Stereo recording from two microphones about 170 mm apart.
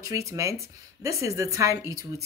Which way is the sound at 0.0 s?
20° right (ahead or behind).